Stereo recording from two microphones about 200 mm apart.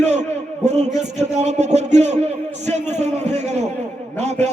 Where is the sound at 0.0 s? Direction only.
35° right (ahead or behind).